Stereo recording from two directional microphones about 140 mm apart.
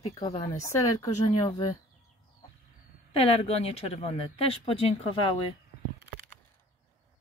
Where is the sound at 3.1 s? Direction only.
45° left (ahead or behind).